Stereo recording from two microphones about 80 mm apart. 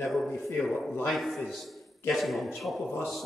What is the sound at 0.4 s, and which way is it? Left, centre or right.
A man's voice, centre.